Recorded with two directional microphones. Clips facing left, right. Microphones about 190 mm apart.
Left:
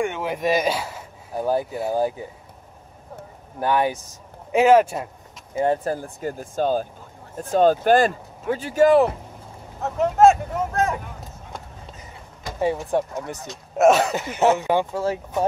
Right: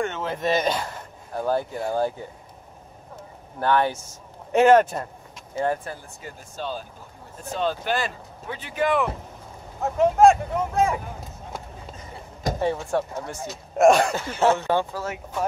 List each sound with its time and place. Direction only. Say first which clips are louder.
0.0 s speech: left 2 dB; 15° left (ahead or behind)
3.5 s speech: left 1 dB; 10° left (ahead or behind)
5.9 s speech: left 11 dB; 45° left (ahead or behind)
9.8 s speech: even; centre (ahead or behind)
12.5 s speech: left 3 dB; 10° left (ahead or behind)
13.5 s speech: even; 5° left (ahead or behind)
14.1 s speech: left 2 dB; 15° left (ahead or behind)
15.0 s speech: left 6 dB; 25° left (ahead or behind)